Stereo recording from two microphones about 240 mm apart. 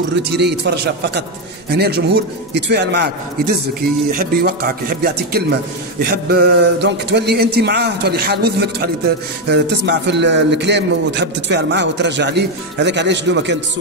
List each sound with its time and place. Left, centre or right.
0.1 s a man's voice: right